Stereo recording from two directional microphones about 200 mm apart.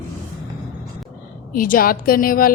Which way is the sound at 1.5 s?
45° left (ahead or behind).